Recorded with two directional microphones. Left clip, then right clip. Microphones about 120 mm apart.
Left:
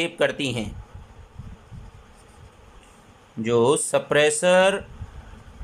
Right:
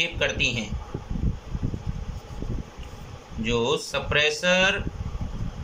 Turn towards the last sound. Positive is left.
turn(degrees=90)